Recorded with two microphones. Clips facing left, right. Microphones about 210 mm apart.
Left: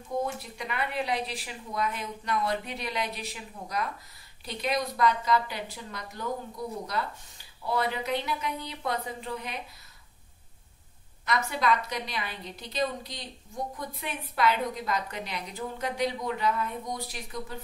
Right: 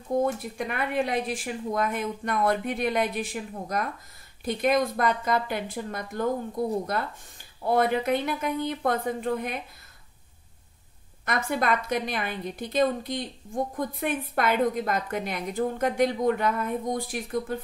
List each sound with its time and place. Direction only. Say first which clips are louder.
0.2 s a woman's voice: right 6 dB; 50° right (ahead or behind)
11.2 s a woman's voice: right 1 dB; 50° right (ahead or behind)